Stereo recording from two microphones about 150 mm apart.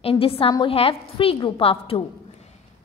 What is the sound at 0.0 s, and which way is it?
A woman's voice, 40° left (ahead or behind).